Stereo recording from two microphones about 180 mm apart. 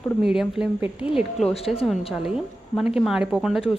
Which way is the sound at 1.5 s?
35° left (ahead or behind).